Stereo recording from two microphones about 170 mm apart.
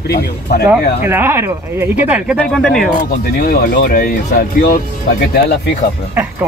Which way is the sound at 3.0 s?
60° left (ahead or behind).